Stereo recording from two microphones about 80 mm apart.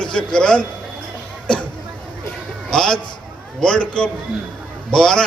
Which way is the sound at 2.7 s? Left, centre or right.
Centre.